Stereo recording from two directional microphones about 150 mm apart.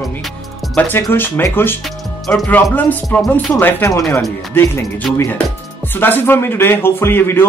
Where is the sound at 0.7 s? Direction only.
15° left (ahead or behind).